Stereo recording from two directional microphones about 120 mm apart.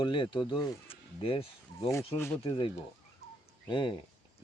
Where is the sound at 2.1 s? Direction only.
20° left (ahead or behind).